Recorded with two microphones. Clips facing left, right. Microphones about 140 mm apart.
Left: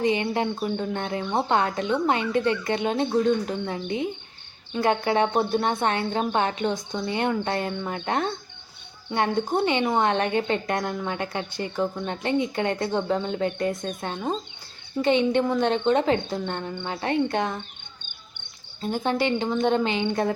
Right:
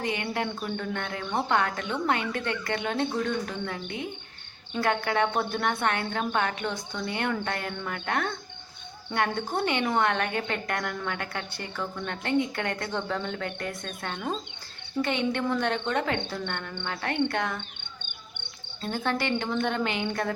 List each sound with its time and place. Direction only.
0.0 s speech: 20° left (ahead or behind)
18.8 s speech: 15° left (ahead or behind)